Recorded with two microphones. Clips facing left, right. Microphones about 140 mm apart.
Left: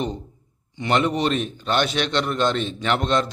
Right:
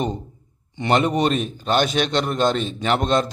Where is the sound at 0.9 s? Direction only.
40° right (ahead or behind).